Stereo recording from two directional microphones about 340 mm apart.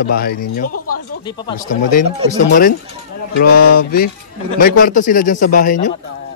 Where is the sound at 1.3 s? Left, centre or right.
Centre.